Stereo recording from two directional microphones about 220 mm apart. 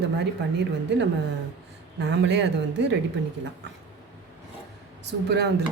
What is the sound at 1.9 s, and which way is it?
Speech, 55° right (ahead or behind).